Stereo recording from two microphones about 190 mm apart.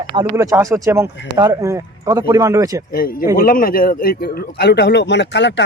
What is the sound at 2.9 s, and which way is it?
A man's voice, 50° left (ahead or behind).